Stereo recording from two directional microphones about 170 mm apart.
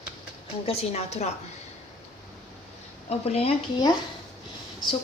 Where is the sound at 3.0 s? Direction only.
35° left (ahead or behind).